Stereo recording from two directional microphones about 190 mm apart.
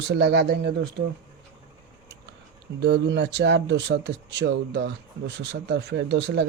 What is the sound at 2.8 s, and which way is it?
Speech, 65° right (ahead or behind).